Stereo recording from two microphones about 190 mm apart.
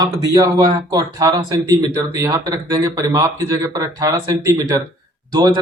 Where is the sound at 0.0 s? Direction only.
20° right (ahead or behind).